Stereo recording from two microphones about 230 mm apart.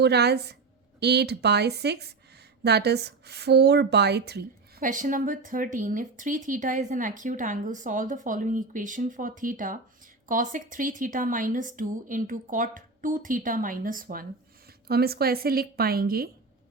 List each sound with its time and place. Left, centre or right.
0.0 s a woman's voice: right